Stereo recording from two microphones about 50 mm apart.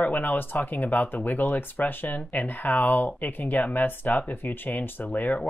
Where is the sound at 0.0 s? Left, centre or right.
Left.